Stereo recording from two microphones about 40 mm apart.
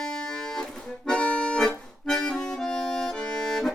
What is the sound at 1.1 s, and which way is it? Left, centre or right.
Accordion, left.